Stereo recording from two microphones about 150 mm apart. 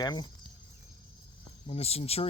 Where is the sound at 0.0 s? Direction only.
25° left (ahead or behind).